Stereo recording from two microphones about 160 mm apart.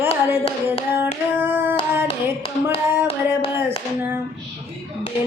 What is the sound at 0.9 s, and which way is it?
Clapping, 15° right (ahead or behind).